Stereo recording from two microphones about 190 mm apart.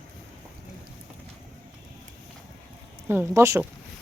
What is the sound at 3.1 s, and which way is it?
Speech, 15° right (ahead or behind).